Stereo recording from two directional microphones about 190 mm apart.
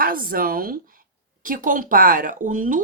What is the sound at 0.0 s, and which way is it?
Speech, 50° right (ahead or behind).